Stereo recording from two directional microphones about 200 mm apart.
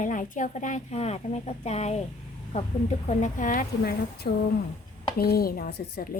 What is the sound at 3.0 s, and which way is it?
A woman's voice, 40° left (ahead or behind).